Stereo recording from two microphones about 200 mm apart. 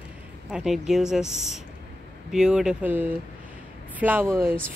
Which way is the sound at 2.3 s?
5° right (ahead or behind).